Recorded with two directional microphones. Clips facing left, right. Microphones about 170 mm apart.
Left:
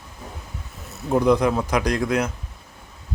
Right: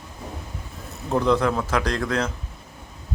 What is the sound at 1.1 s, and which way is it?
Speech, 15° left (ahead or behind).